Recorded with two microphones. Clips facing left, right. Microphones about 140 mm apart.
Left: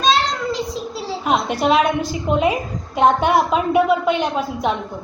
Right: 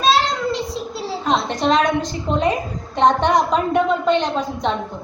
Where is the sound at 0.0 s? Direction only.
Centre (ahead or behind).